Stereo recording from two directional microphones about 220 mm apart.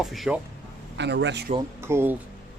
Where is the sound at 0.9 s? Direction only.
55° right (ahead or behind).